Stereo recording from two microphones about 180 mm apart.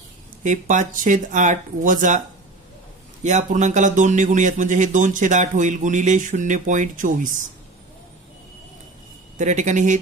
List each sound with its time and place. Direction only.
0.4 s speech: 45° right (ahead or behind)
3.3 s speech: 40° right (ahead or behind)
9.4 s speech: 45° right (ahead or behind)